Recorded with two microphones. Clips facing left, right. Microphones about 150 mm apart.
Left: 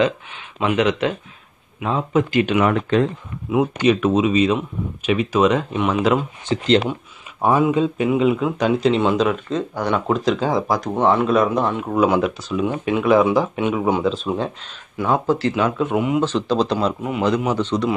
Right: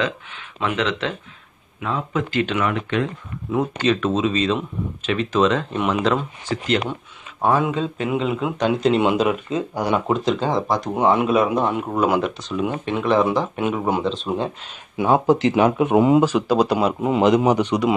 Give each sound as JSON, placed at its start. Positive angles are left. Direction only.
{"t": 0.0, "sound": "speech", "side_deg": 20}
{"t": 2.6, "sound": "speech", "side_deg": 35}
{"t": 3.5, "sound": "speech", "side_deg": 15}
{"t": 6.4, "sound": "speech", "side_deg": 25}
{"t": 7.4, "sound": "speech", "side_deg": 10}
{"t": 9.0, "sound": "speech", "side_deg": -10}
{"t": 11.0, "sound": "speech", "side_deg": -5}
{"t": 15.0, "sound": "speech", "side_deg": -20}
{"t": 16.2, "sound": "speech", "side_deg": -10}
{"t": 17.0, "sound": "speech", "side_deg": -20}